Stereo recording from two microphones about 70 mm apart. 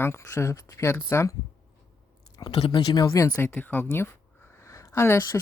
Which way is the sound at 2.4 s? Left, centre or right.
Left.